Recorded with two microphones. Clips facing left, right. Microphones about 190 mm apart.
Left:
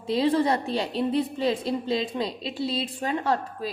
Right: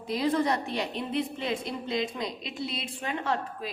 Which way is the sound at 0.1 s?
30° left (ahead or behind).